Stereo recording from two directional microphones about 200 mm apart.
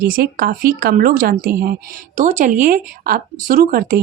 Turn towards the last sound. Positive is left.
turn(degrees=-45)  # may be behind; listen again after turning